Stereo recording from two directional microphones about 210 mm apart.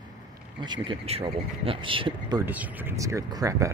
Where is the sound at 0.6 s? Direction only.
20° right (ahead or behind).